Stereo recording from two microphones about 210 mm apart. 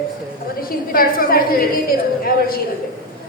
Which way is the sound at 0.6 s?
45° left (ahead or behind).